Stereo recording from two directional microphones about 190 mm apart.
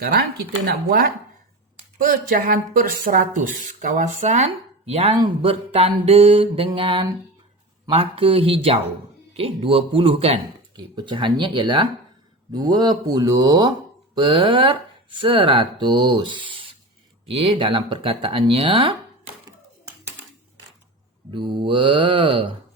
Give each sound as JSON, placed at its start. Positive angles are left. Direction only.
{"t": 0.0, "sound": "speech", "side_deg": -50}
{"t": 21.2, "sound": "mantra", "side_deg": -25}
{"t": 21.6, "sound": "speech", "side_deg": -25}